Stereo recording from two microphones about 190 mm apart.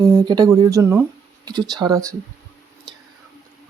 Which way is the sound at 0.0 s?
20° right (ahead or behind).